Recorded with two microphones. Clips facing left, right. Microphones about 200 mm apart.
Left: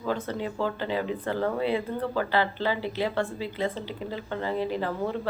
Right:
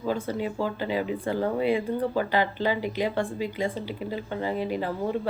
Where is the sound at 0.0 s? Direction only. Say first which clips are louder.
Right 2 dB; 10° right (ahead or behind).